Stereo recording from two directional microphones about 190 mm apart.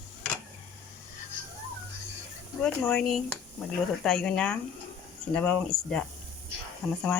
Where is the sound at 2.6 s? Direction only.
5° left (ahead or behind).